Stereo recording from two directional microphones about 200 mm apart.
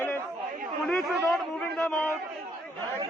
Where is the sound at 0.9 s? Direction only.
5° left (ahead or behind).